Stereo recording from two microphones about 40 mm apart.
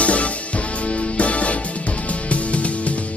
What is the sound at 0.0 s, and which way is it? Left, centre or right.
Music, left.